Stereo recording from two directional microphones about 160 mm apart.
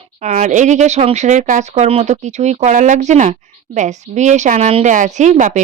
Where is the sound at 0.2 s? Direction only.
45° right (ahead or behind).